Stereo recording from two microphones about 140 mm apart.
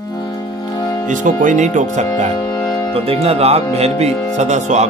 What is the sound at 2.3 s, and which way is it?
Music, 25° left (ahead or behind).